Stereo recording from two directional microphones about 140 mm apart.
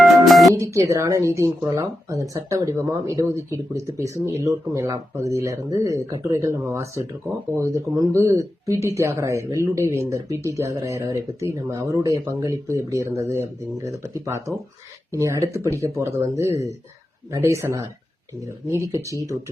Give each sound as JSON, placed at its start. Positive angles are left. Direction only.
{"t": 0.0, "sound": "music", "side_deg": 0}
{"t": 0.6, "sound": "speech", "side_deg": -20}